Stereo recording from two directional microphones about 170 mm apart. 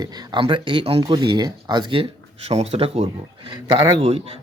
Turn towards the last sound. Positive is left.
turn(degrees=-35)  # may be behind; listen again after turning